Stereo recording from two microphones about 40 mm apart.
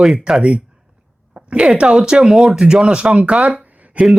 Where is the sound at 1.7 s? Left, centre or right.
Right.